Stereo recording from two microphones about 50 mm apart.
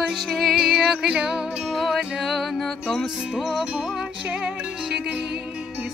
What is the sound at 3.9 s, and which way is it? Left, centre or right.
Music, centre.